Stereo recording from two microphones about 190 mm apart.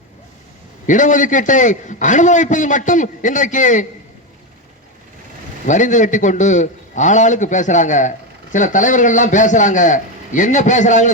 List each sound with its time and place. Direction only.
0.9 s a man's voice: 40° left (ahead or behind)
5.6 s a man's voice: 40° left (ahead or behind)